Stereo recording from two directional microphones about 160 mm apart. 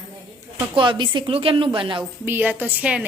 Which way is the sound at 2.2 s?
10° right (ahead or behind).